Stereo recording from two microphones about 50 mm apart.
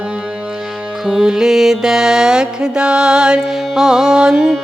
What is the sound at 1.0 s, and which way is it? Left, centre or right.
Music, centre.